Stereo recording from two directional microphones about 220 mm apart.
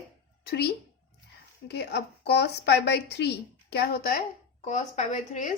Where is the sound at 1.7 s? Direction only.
50° left (ahead or behind).